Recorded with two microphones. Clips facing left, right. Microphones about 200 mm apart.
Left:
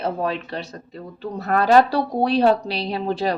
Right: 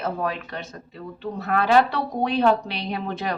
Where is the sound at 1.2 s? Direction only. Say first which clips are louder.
Left 3 dB; 40° left (ahead or behind).